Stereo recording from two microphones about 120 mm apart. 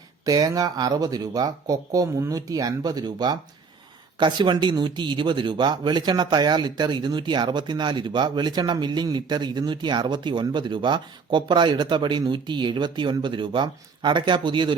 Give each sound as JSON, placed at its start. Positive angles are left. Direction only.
{"t": 0.3, "sound": "speech", "side_deg": -30}